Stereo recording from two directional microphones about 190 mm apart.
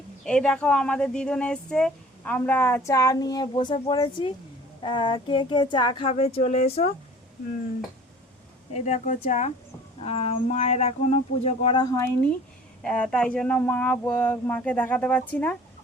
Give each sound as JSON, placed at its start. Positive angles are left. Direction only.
{"t": 0.3, "sound": "speech", "side_deg": 5}
{"t": 8.7, "sound": "speech", "side_deg": 35}
{"t": 11.8, "sound": "speech", "side_deg": 15}